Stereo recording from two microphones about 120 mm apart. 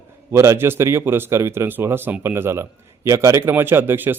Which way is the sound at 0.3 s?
25° right (ahead or behind).